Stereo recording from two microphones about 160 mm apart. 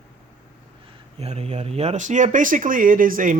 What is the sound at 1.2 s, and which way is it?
Speech, 40° right (ahead or behind).